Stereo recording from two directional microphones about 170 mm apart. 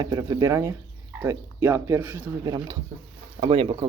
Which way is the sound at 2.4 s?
20° right (ahead or behind).